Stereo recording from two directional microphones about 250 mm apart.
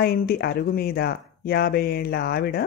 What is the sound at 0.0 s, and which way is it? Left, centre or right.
Speech, left.